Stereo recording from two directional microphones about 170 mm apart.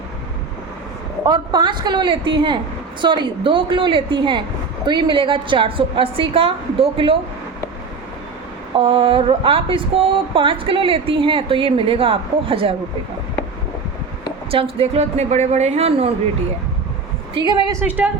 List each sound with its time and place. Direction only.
1.3 s a woman's voice: 25° right (ahead or behind)
8.7 s speech: 30° right (ahead or behind)
14.5 s speech: 35° right (ahead or behind)
17.3 s a woman's voice: 25° right (ahead or behind)
17.7 s speech: 10° right (ahead or behind)